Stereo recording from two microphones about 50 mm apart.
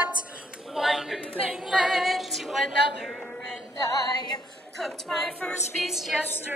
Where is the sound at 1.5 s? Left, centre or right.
Centre.